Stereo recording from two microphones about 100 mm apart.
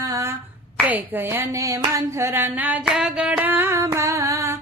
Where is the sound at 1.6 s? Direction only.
35° right (ahead or behind); by 2.8 s 15° right (ahead or behind).